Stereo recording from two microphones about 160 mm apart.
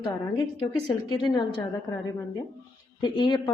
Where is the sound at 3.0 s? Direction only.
30° left (ahead or behind).